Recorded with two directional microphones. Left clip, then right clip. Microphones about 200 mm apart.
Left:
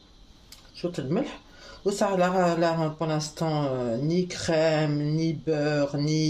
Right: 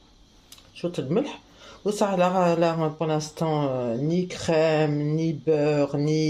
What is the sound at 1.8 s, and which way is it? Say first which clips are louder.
Speech: right 1 dB; 15° right (ahead or behind).